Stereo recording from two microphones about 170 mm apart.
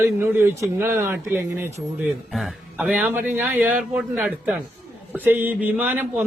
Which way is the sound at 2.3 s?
Centre (ahead or behind).